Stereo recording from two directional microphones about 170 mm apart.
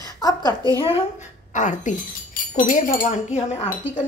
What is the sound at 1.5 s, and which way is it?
A woman's voice, 45° left (ahead or behind).